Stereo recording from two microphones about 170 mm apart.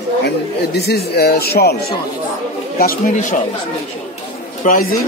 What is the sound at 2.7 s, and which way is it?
Speech, 60° left (ahead or behind).